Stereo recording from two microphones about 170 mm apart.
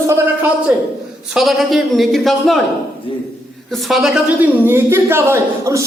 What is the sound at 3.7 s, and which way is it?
A woman's voice, centre (ahead or behind).